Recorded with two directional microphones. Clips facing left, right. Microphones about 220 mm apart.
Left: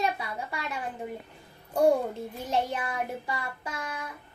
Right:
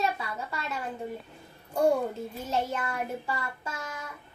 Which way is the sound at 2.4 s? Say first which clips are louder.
Left 1 dB; 15° left (ahead or behind).